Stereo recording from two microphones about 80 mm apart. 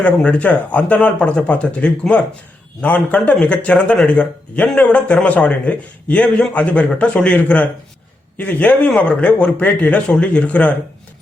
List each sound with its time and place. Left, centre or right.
0.0 s a man's voice: centre